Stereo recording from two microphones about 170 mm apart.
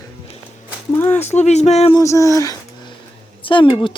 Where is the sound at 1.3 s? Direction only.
40° left (ahead or behind).